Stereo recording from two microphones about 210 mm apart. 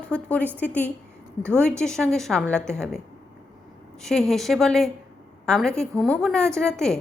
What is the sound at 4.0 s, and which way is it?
A woman's voice, centre (ahead or behind).